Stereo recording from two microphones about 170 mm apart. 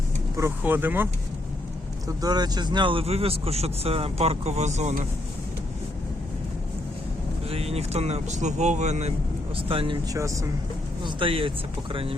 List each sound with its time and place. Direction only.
0.3 s speech: 15° right (ahead or behind)
2.2 s speech: 25° right (ahead or behind); by 5.0 s 45° right (ahead or behind)
7.5 s speech: 35° right (ahead or behind)
9.6 s speech: 30° right (ahead or behind)
10.2 s speech: 20° right (ahead or behind)
11.0 s speech: 30° right (ahead or behind)